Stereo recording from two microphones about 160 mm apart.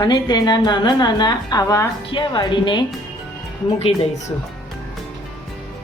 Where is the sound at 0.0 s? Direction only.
25° left (ahead or behind).